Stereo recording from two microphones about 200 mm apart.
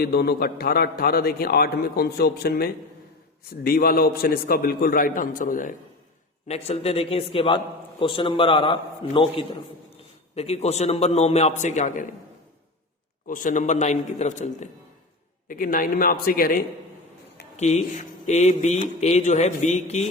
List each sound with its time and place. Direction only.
0.0 s a man's voice: 50° left (ahead or behind)
13.2 s a man's voice: 40° left (ahead or behind)
17.6 s speech: 35° left (ahead or behind)